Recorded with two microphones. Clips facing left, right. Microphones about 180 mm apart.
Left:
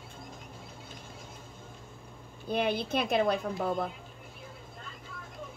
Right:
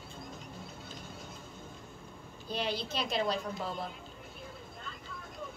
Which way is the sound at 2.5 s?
55° left (ahead or behind).